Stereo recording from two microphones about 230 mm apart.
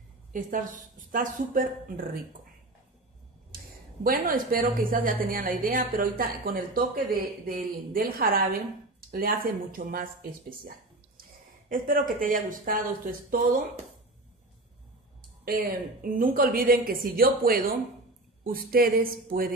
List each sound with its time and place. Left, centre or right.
0.3 s a woman's voice: right
4.0 s a woman's voice: right
11.7 s a woman's voice: right
15.4 s a woman's voice: right